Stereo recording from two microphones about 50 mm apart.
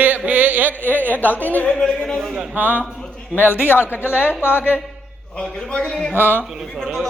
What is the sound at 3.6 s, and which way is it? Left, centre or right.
Speech, left.